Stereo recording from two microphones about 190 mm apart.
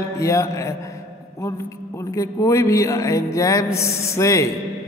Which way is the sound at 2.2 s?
15° left (ahead or behind).